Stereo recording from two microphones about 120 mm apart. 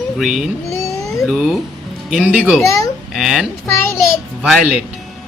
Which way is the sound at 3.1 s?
5° right (ahead or behind).